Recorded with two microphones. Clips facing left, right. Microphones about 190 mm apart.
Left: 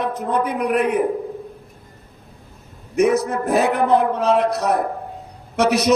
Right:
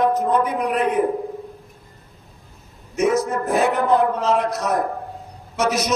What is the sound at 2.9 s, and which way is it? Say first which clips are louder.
A man's voice: left 2 dB; 60° left (ahead or behind).